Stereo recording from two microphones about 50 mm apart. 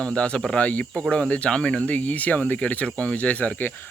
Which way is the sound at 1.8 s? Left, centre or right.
Left.